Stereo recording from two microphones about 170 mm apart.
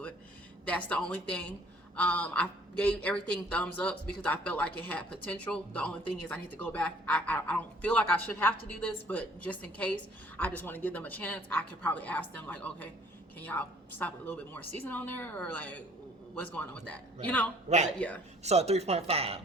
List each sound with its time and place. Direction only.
0.6 s speech: 5° left (ahead or behind)
17.7 s speech: 40° right (ahead or behind)